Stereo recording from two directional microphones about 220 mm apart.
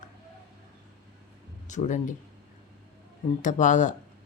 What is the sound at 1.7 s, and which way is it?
Speech, 35° left (ahead or behind).